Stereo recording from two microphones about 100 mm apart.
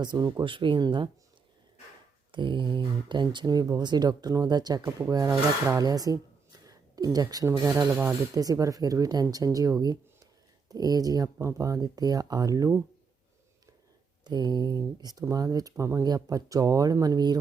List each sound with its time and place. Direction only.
0.0 s speech: 45° right (ahead or behind)
0.4 s speech: 55° right (ahead or behind)
2.3 s speech: 55° right (ahead or behind); by 6.1 s 40° right (ahead or behind)
6.7 s a sound: 35° right (ahead or behind)
7.4 s speech: 30° right (ahead or behind)
14.3 s speech: 45° right (ahead or behind)
15.7 s speech: 25° right (ahead or behind)
16.0 s speech: 40° right (ahead or behind)